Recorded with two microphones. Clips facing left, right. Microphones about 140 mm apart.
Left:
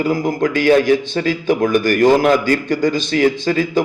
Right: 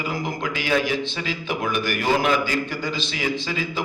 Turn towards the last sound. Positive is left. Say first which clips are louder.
# left 10 dB
turn(degrees=50)  # may be behind; listen again after turning